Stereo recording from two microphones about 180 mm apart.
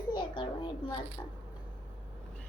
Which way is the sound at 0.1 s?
25° left (ahead or behind).